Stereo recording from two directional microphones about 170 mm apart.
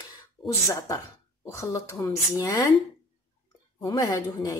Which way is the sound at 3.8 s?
25° left (ahead or behind).